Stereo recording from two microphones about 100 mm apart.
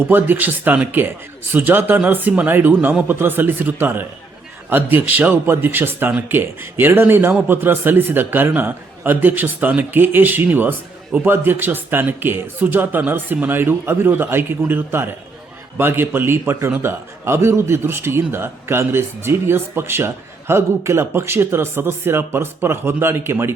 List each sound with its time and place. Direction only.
0.0 s speech: 20° right (ahead or behind)